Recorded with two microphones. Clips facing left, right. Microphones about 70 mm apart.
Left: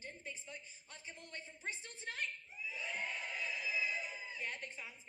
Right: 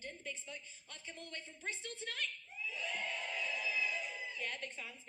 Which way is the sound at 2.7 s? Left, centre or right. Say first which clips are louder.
Right 1 dB; right.